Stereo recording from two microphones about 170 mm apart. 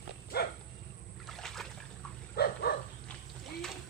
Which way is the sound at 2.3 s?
65° left (ahead or behind).